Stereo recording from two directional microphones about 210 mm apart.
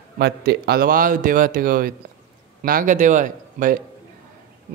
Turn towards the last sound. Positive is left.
turn(degrees=-40)  # may be behind; listen again after turning